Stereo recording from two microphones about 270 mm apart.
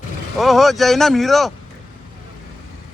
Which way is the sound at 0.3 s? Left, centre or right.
Centre.